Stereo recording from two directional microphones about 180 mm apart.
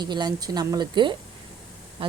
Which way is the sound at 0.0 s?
25° right (ahead or behind).